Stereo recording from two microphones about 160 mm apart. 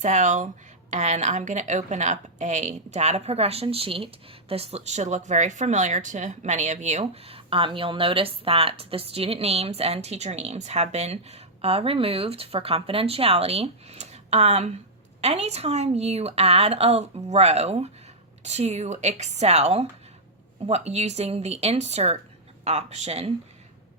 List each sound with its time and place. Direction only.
0.0 s a woman's voice: 50° right (ahead or behind)